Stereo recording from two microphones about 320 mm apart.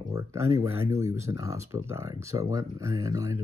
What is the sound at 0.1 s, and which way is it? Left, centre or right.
Speech, centre.